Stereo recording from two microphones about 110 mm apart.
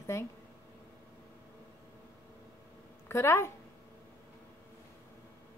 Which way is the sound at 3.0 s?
25° left (ahead or behind).